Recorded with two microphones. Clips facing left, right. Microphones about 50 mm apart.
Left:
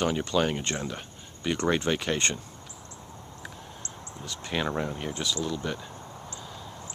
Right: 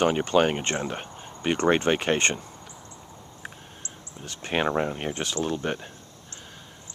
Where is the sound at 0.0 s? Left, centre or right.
Right.